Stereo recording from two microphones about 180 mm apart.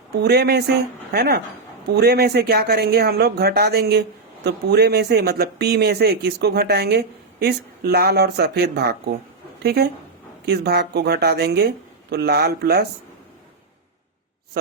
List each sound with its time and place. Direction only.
0.2 s speech: 60° right (ahead or behind)